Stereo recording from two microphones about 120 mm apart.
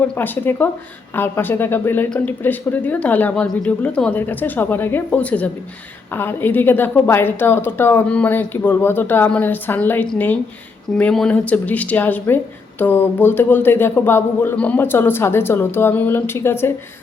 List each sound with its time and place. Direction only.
0.0 s a woman's voice: 15° left (ahead or behind)